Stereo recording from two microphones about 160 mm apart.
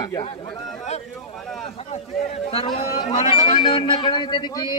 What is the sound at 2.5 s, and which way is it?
Speech, 35° left (ahead or behind).